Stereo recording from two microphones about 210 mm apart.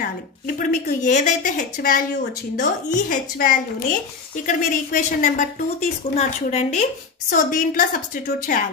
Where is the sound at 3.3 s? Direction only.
45° left (ahead or behind).